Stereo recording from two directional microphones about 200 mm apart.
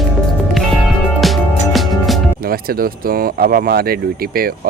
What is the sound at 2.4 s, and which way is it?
Speech, 45° right (ahead or behind).